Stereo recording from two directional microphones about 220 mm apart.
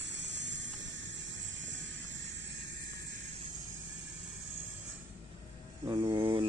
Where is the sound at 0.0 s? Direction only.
55° right (ahead or behind).